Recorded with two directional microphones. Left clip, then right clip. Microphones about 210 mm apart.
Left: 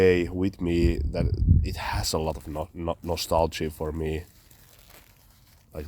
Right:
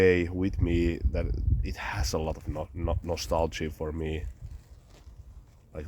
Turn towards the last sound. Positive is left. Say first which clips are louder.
# left 3 dB
turn(degrees=35)  # may be behind; listen again after turning